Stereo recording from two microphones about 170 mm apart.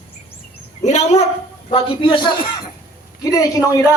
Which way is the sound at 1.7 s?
30° left (ahead or behind).